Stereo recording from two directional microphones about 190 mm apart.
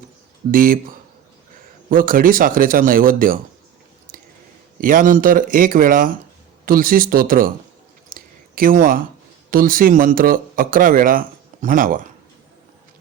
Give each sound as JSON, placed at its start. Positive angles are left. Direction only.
{"t": 0.5, "sound": "speech", "side_deg": -45}
{"t": 1.9, "sound": "speech", "side_deg": -50}
{"t": 4.8, "sound": "speech", "side_deg": -45}
{"t": 8.1, "sound": "a sound", "side_deg": -45}
{"t": 9.5, "sound": "speech", "side_deg": -50}